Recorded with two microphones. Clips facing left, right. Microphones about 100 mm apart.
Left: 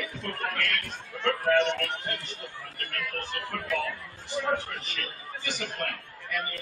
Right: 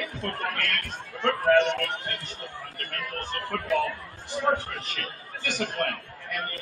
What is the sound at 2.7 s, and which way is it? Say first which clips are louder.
A man's voice: left 1 dB; 40° right (ahead or behind).